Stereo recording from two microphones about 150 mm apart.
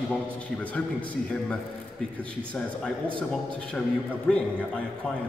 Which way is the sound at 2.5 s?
5° left (ahead or behind).